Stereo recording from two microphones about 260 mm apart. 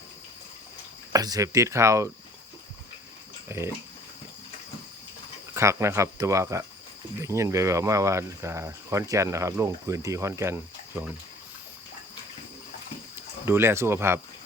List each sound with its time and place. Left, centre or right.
1.1 s speech: centre
3.5 s speech: centre
5.5 s speech: centre
13.4 s speech: centre